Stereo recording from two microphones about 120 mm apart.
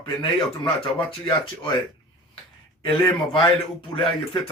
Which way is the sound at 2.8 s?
45° left (ahead or behind).